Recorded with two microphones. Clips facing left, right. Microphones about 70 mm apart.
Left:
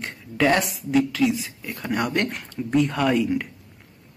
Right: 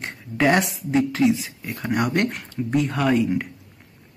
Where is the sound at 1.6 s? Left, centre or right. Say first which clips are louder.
Right 1 dB; centre.